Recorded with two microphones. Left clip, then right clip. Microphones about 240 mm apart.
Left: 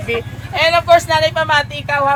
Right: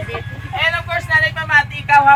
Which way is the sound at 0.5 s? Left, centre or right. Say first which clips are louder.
Left 7 dB; left.